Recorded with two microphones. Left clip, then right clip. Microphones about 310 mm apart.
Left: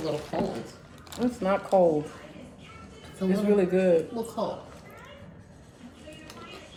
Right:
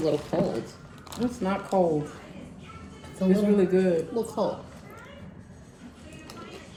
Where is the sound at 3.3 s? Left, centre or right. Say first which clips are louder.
Right 1 dB; centre.